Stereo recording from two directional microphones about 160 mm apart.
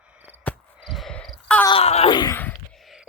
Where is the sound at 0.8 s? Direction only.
Centre (ahead or behind).